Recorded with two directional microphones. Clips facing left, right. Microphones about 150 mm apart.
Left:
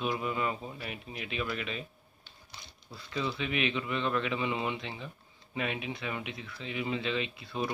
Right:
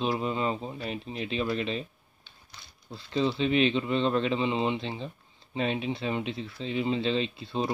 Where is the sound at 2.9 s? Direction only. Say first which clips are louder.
Right 7 dB; 30° right (ahead or behind).